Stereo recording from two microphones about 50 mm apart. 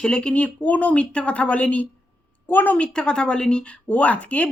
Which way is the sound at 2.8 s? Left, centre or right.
Centre.